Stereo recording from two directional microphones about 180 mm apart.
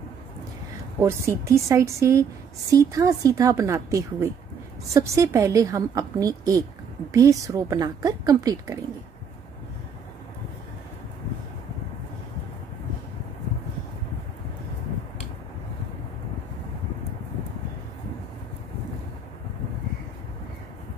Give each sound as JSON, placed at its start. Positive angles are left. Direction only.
{"t": 1.0, "sound": "a woman's voice", "side_deg": -15}